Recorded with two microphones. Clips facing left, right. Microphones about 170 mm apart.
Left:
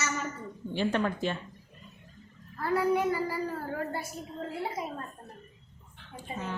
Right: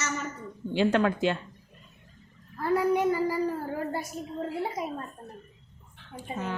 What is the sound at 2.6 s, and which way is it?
Speech, 20° right (ahead or behind).